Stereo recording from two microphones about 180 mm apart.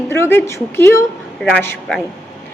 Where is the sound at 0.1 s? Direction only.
15° left (ahead or behind).